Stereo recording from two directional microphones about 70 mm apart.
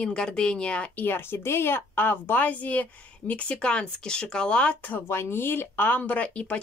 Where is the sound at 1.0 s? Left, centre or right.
Left; by 5.0 s centre.